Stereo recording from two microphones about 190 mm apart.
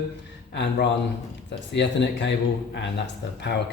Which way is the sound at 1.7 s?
70° left (ahead or behind).